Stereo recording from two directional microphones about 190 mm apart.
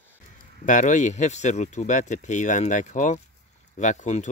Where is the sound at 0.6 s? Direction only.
40° left (ahead or behind).